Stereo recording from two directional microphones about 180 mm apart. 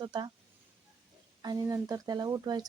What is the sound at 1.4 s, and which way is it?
A woman's voice, 20° right (ahead or behind).